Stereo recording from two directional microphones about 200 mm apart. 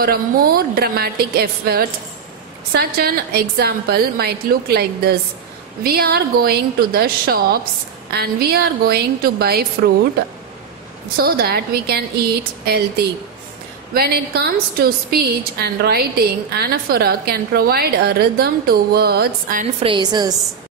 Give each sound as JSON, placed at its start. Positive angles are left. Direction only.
{"t": 0.0, "sound": "a woman's voice", "side_deg": -50}
{"t": 11.1, "sound": "a woman's voice", "side_deg": -50}
{"t": 19.8, "sound": "a woman's voice", "side_deg": -25}